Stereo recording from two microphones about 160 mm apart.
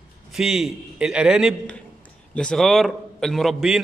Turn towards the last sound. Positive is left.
turn(degrees=0)  # may be behind; listen again after turning